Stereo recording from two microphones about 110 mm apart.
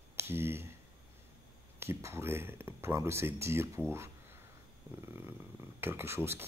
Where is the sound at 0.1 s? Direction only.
20° right (ahead or behind).